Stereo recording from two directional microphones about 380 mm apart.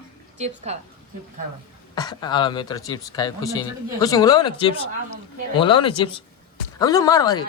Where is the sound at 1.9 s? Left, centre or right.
Centre.